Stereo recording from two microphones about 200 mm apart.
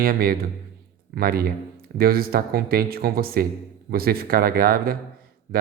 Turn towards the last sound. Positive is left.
turn(degrees=-45)  # may be behind; listen again after turning